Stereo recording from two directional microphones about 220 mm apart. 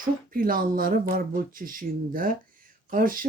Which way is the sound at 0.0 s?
40° right (ahead or behind).